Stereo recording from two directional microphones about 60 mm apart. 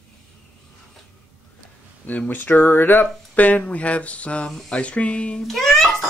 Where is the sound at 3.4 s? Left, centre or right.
Left.